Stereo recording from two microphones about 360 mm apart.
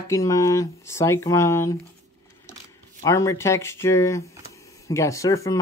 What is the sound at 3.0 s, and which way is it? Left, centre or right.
Speech, centre.